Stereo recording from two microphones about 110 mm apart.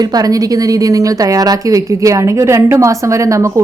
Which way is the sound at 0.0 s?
35° right (ahead or behind).